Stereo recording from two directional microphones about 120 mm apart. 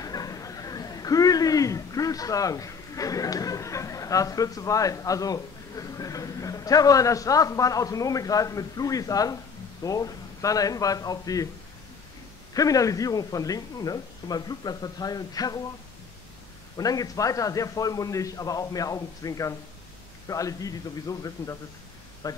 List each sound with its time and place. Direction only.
0.0 s a man's voice: 30° left (ahead or behind)
12.5 s speech: 30° left (ahead or behind)
16.7 s a man's voice: 30° left (ahead or behind)